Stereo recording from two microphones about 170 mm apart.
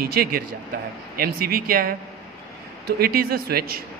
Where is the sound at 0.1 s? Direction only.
65° right (ahead or behind).